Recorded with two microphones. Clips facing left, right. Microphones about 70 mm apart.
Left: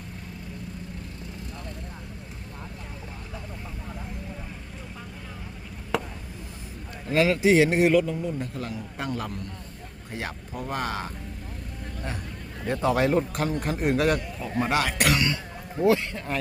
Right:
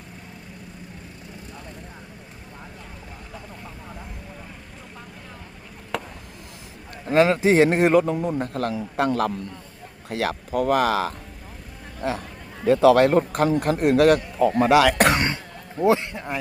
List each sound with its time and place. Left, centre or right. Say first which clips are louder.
5.9 s chop: left 2 dB; centre
7.1 s speech: right 3 dB; right
8.0 s a man's voice: right 5 dB; right
10.1 s speech: right 9 dB; right
12.0 s speech: right 10 dB; right
12.8 s speech: right 8 dB; right
13.1 s a man's voice: right 5 dB; right
14.3 s speech: right 9 dB; right
14.9 s a man's voice: right 4 dB; right; by 16.4 s centre